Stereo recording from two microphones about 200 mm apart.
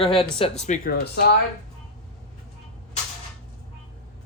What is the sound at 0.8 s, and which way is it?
Speech, 55° left (ahead or behind).